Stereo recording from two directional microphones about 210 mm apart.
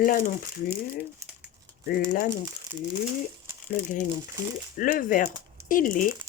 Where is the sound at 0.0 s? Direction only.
40° left (ahead or behind).